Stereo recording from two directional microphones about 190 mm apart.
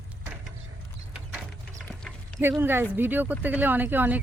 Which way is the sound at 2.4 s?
10° right (ahead or behind).